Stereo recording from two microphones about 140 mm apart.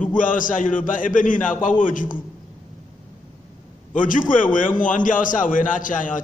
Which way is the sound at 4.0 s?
70° left (ahead or behind).